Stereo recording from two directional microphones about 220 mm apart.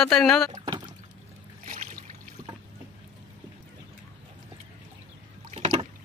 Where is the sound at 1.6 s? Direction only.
35° right (ahead or behind).